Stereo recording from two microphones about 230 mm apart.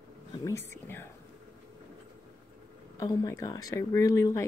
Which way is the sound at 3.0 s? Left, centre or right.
Centre.